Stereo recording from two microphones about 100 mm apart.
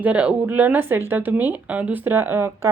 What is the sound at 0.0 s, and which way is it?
Speech, 15° right (ahead or behind).